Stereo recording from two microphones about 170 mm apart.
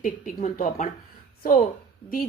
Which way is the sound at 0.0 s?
50° left (ahead or behind).